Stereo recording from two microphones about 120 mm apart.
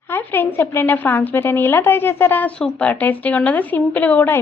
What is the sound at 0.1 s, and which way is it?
A woman's voice, 15° left (ahead or behind).